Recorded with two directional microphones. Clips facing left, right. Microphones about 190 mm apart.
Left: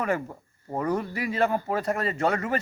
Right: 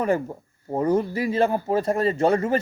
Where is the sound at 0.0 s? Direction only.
30° right (ahead or behind).